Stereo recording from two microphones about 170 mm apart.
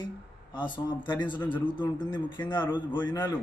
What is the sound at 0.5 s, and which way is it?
Speech, 25° left (ahead or behind).